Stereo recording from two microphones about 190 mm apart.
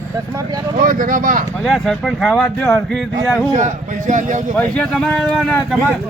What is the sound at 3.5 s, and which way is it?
Speech, 40° right (ahead or behind).